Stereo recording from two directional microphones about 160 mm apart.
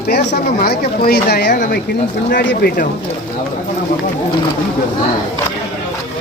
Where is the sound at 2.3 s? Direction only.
70° left (ahead or behind).